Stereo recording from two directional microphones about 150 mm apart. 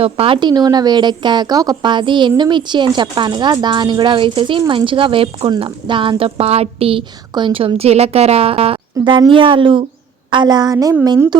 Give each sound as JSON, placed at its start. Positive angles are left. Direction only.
{"t": 0.0, "sound": "a woman's voice", "side_deg": -40}